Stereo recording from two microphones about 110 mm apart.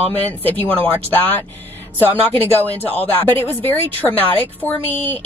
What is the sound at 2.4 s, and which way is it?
Speech, 15° left (ahead or behind).